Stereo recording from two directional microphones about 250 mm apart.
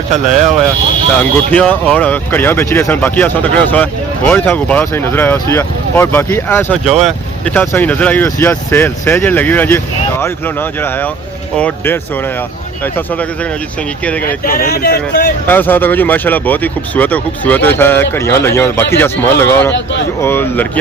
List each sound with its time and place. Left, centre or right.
0.1 s speech: right
1.5 s speech: centre
14.3 s speech: left
15.4 s speech: centre
19.7 s speech: left
20.2 s speech: centre